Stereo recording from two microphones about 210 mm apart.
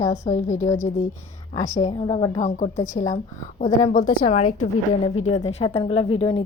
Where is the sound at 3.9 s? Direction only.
40° left (ahead or behind).